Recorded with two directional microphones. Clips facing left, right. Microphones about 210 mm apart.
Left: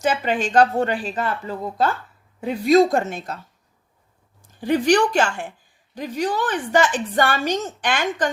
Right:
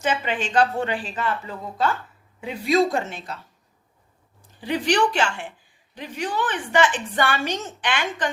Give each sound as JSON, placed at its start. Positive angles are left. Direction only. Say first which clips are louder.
{"t": 0.0, "sound": "a woman's voice", "louder": "left 4 dB", "side_deg": 40}
{"t": 4.6, "sound": "a woman's voice", "louder": "left 4 dB", "side_deg": 45}